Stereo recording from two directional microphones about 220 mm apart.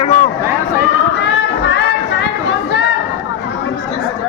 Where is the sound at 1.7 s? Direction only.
50° left (ahead or behind).